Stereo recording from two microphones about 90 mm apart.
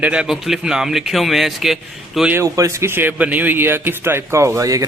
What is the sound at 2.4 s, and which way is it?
A man's voice, 35° right (ahead or behind).